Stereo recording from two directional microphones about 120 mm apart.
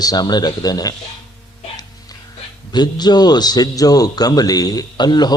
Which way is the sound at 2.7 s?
35° left (ahead or behind).